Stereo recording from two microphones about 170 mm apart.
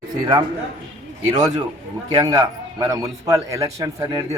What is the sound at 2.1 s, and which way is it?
A man's voice, 20° right (ahead or behind).